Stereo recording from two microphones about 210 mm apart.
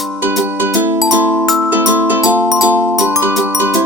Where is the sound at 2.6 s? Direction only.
10° right (ahead or behind).